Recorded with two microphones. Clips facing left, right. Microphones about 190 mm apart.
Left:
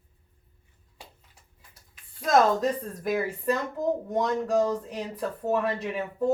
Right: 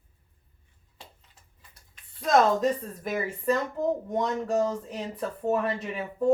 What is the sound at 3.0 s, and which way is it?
Speech, centre (ahead or behind).